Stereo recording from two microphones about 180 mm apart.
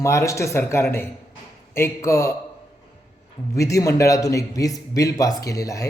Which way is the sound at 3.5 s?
15° left (ahead or behind).